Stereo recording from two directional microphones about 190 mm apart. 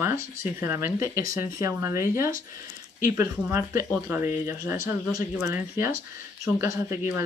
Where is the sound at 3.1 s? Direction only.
15° right (ahead or behind).